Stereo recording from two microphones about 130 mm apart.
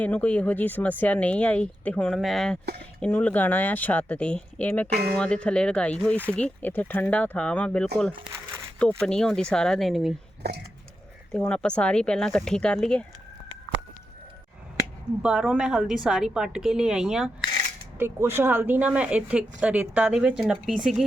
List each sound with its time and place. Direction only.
0.0 s speech: 10° left (ahead or behind)
8.1 s crumpling: 40° right (ahead or behind)
9.0 s a woman's voice: 5° left (ahead or behind)
11.3 s speech: 10° left (ahead or behind)
15.2 s a woman's voice: 5° right (ahead or behind)
17.9 s speech: 20° right (ahead or behind)